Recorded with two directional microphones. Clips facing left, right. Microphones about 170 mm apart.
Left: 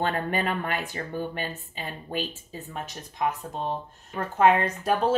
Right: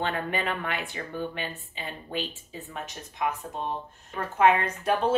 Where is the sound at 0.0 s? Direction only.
40° left (ahead or behind).